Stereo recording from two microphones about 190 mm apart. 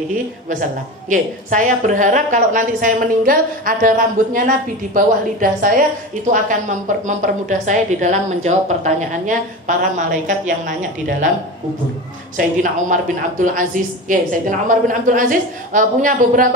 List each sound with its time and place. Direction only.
0.5 s a woman's voice: 45° right (ahead or behind)
12.4 s a woman's voice: 45° right (ahead or behind)